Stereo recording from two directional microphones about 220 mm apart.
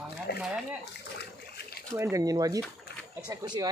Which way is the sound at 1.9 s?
15° right (ahead or behind).